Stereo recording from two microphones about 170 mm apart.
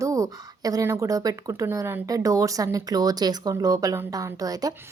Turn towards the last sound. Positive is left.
turn(degrees=-20)  # may be behind; listen again after turning